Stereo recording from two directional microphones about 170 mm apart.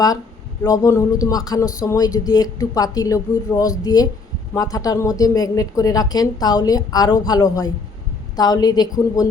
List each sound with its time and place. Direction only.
0.6 s speech: 20° left (ahead or behind)